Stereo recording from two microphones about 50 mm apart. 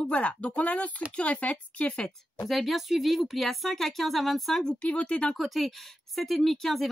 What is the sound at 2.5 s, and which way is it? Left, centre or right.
Speech, centre.